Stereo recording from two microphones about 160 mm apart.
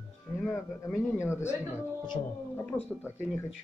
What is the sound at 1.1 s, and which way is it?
Speech, 15° left (ahead or behind).